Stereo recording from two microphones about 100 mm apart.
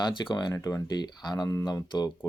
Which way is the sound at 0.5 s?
35° left (ahead or behind).